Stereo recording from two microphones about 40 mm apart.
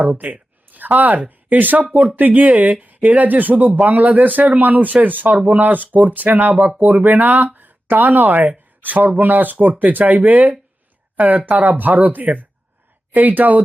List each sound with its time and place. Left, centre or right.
0.0 s speech: right